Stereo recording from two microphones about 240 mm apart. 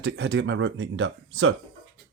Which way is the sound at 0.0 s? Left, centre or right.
Right.